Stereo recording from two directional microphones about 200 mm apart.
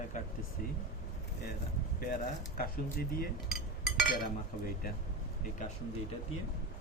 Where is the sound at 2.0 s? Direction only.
45° left (ahead or behind).